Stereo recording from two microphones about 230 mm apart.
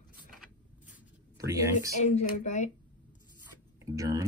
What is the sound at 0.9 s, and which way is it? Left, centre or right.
Writing, centre.